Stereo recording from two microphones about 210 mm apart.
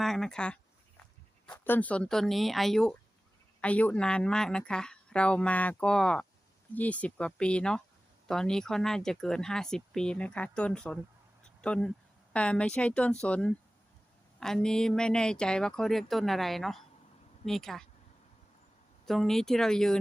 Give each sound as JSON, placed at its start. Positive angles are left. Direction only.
{"t": 0.0, "sound": "speech", "side_deg": 0}
{"t": 19.0, "sound": "speech", "side_deg": 0}